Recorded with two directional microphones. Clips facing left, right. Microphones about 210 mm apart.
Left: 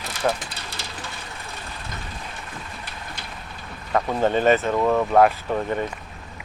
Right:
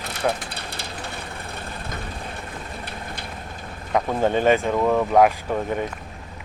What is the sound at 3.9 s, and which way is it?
Speech, 10° right (ahead or behind).